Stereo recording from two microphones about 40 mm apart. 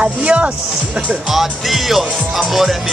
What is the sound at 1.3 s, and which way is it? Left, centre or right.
Speech, centre.